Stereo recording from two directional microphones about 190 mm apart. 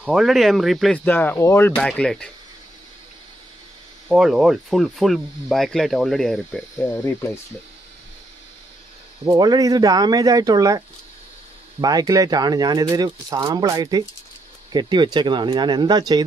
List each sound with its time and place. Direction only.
0.0 s speech: centre (ahead or behind)
4.1 s speech: centre (ahead or behind)
9.2 s speech: 20° right (ahead or behind)
11.8 s speech: 20° right (ahead or behind)